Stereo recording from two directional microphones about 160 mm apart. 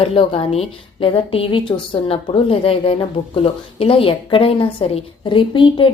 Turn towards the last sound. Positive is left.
turn(degrees=30)  # may be behind; listen again after turning